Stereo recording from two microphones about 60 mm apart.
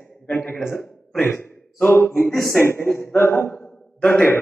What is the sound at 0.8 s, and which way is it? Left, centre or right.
Speech, centre.